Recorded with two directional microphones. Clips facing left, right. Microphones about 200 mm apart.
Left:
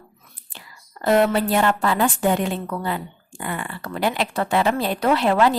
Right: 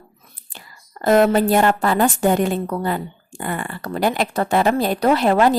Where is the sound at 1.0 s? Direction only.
45° right (ahead or behind).